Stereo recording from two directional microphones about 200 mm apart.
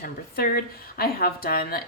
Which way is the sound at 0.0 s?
45° left (ahead or behind).